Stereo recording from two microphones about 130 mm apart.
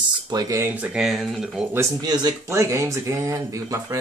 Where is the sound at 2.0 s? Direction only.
30° right (ahead or behind).